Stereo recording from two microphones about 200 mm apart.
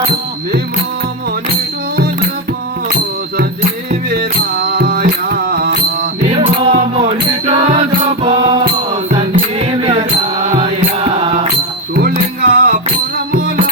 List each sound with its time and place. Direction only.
4.6 s music: 55° right (ahead or behind)
6.4 s music: 35° right (ahead or behind)
11.9 s music: 45° right (ahead or behind)